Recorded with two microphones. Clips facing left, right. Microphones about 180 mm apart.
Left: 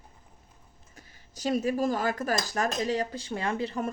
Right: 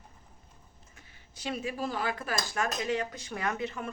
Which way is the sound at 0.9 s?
40° left (ahead or behind).